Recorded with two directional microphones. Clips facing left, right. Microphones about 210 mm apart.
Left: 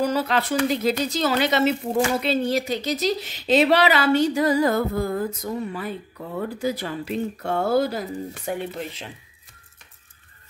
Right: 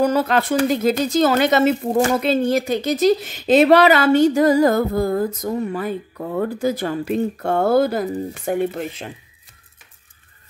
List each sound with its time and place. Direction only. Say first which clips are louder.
0.0 s a woman's voice: right 5 dB; 50° right (ahead or behind)